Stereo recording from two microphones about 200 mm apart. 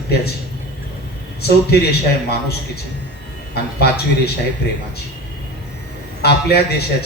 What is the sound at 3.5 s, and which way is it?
Speech, 55° left (ahead or behind).